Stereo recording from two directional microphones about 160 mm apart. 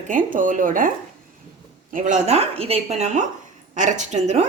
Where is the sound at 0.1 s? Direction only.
55° right (ahead or behind).